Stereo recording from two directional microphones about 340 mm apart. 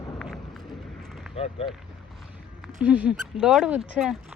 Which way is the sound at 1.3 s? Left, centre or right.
Centre.